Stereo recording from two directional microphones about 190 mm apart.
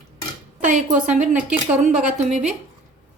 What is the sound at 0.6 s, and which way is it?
Speech, 40° right (ahead or behind).